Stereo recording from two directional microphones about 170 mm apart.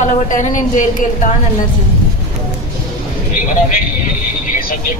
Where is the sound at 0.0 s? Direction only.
45° left (ahead or behind).